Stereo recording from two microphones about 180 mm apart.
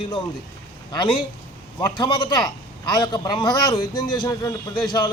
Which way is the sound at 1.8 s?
25° left (ahead or behind).